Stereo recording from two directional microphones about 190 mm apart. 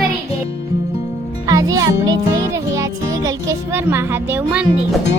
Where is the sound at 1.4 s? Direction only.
20° right (ahead or behind).